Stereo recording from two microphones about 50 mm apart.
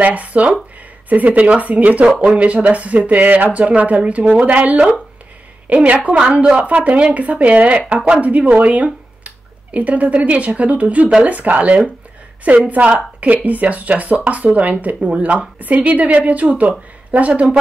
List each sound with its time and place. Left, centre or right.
0.0 s speech: right